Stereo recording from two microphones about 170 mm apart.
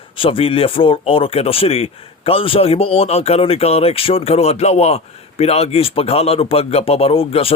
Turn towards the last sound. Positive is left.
turn(degrees=35)  # may be behind; listen again after turning